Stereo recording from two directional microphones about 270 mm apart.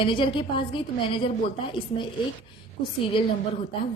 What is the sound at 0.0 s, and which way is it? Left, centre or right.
A woman's voice, centre.